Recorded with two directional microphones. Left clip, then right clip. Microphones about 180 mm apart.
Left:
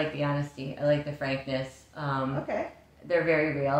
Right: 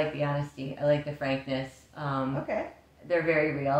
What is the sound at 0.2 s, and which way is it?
Speech, 15° left (ahead or behind).